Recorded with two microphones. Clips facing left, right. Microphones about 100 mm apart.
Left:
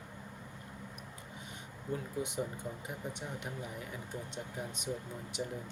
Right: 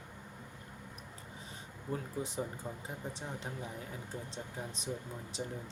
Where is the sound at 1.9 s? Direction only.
35° right (ahead or behind).